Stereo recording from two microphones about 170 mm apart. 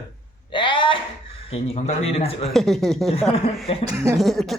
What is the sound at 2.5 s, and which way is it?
Speech, centre (ahead or behind).